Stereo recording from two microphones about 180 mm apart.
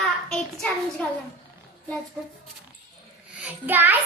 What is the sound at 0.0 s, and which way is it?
Child singing, 5° left (ahead or behind).